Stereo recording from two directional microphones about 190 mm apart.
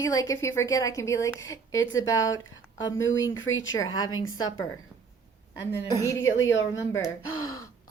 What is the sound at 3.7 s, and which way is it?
Speech, 20° left (ahead or behind).